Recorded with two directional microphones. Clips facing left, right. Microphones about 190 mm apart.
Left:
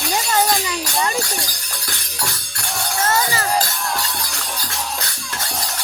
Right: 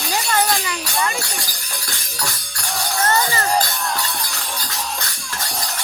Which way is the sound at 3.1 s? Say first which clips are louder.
Even; 5° left (ahead or behind).